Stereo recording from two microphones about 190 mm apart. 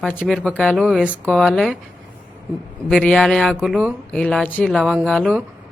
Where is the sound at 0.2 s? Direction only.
5° left (ahead or behind).